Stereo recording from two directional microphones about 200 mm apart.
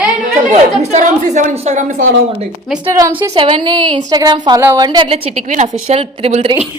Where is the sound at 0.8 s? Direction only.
35° right (ahead or behind).